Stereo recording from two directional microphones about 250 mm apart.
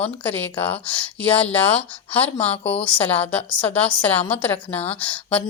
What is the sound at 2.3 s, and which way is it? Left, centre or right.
Speech, left.